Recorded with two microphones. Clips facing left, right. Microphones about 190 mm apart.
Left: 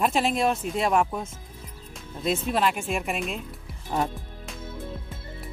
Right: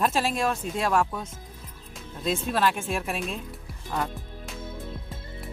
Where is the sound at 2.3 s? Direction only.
15° left (ahead or behind).